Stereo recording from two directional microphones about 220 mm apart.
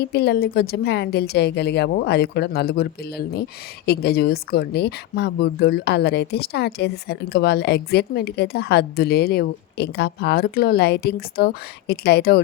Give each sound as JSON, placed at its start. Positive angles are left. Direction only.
{"t": 0.0, "sound": "speech", "side_deg": 50}